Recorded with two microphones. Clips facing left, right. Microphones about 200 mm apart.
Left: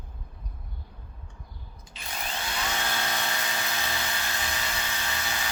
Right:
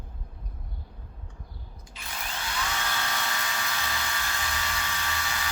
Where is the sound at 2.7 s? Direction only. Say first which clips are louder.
Left 2 dB; 25° left (ahead or behind).